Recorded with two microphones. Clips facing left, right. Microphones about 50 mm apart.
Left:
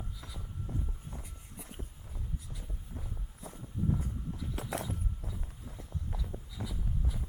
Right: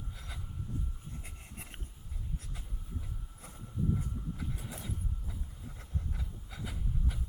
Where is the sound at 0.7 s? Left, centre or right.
Left.